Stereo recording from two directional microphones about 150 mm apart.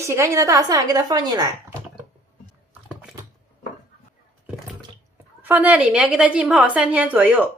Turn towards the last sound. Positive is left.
turn(degrees=-10)  # may be behind; listen again after turning